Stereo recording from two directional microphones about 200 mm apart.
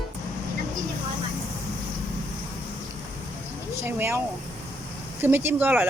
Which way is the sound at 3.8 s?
10° right (ahead or behind).